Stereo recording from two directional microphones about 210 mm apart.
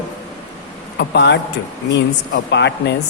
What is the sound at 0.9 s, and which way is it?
Speech, 55° left (ahead or behind).